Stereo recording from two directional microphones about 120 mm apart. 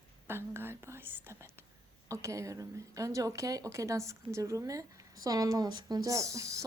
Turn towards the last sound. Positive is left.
turn(degrees=-25)  # may be behind; listen again after turning